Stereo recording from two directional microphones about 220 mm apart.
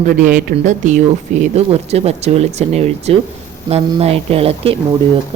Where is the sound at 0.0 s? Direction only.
35° right (ahead or behind).